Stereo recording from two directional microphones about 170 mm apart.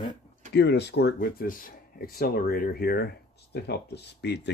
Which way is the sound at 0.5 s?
80° left.